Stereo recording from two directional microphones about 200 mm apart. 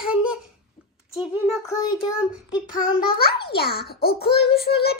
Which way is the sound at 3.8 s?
50° left (ahead or behind).